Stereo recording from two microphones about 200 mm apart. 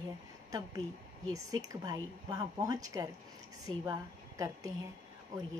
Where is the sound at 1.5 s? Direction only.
20° right (ahead or behind).